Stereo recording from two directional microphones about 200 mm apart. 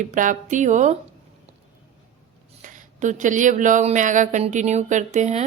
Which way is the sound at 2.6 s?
40° right (ahead or behind).